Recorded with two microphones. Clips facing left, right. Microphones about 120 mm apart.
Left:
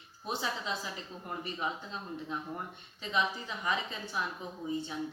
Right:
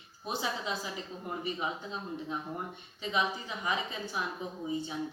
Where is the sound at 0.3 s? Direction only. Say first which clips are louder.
Right 1 dB; 10° right (ahead or behind).